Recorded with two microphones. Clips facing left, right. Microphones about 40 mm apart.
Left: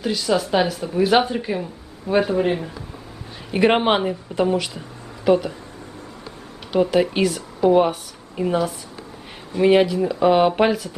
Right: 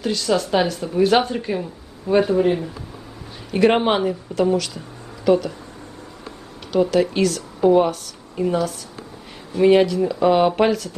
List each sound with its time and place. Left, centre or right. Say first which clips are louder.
0.0 s speech: even; centre
6.7 s speech: even; centre